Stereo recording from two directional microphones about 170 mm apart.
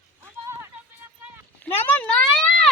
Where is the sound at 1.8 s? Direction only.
10° left (ahead or behind).